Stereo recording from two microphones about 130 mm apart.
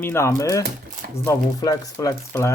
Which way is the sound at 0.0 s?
20° left (ahead or behind).